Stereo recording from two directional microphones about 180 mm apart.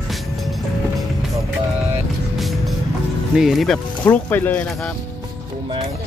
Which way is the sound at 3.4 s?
Centre (ahead or behind).